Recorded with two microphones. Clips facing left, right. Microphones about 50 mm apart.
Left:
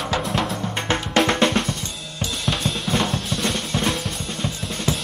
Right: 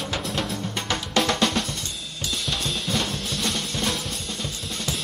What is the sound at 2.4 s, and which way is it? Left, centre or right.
Drum kit, left.